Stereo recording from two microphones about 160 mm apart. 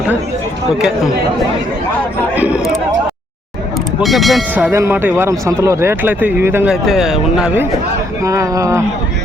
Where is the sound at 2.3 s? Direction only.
10° right (ahead or behind).